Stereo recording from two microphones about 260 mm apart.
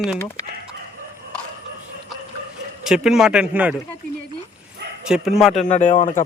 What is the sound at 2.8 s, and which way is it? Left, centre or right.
Speech, centre.